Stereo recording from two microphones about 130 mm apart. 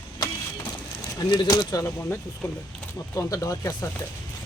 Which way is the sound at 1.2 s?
35° left (ahead or behind).